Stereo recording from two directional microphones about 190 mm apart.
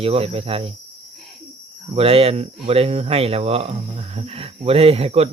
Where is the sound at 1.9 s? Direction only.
30° right (ahead or behind).